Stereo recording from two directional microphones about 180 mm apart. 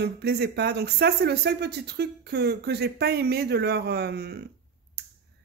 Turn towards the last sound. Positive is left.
turn(degrees=-65)  # may be behind; listen again after turning